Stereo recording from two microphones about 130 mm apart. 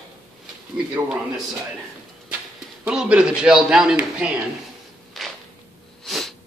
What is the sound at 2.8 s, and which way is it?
A man's voice, 10° right (ahead or behind).